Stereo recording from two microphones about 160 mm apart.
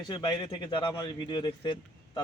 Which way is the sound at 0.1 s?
30° left (ahead or behind).